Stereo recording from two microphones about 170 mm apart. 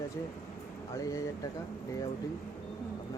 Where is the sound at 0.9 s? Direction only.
20° left (ahead or behind).